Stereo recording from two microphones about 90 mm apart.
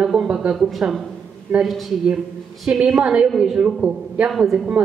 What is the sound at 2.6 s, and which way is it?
A woman's voice, 10° right (ahead or behind).